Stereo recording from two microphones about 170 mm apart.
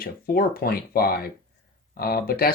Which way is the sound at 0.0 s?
60° left (ahead or behind).